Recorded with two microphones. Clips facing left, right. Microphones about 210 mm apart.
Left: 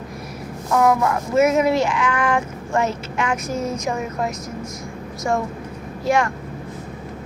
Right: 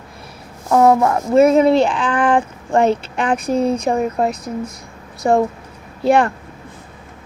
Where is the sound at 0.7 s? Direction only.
30° right (ahead or behind).